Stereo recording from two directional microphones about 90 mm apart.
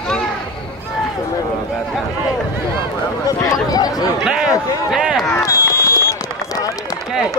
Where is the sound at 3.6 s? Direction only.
45° left (ahead or behind).